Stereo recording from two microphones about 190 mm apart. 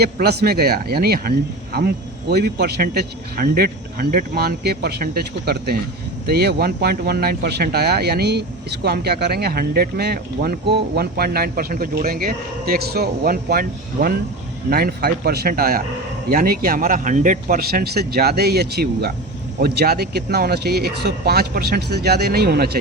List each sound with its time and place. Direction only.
0.0 s speech: 55° right (ahead or behind)
2.3 s a man's voice: 60° right (ahead or behind)